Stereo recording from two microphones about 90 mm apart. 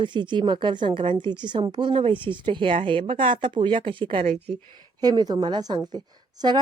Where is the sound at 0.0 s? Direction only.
60° right (ahead or behind).